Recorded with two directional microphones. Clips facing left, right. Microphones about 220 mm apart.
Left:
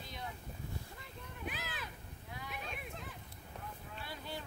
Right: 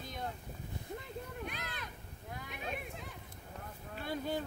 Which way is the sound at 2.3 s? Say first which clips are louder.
Right 1 dB; 45° right (ahead or behind).